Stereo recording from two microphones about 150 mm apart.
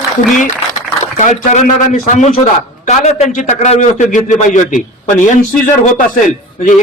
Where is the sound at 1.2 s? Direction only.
55° left (ahead or behind).